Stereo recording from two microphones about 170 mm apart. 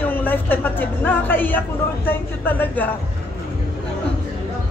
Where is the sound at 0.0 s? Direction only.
10° left (ahead or behind).